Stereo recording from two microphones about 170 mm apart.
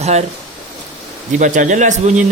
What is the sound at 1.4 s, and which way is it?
Speech, 50° right (ahead or behind).